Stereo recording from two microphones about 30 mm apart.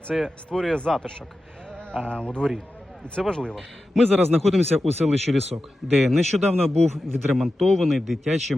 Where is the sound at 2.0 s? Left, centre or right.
Left.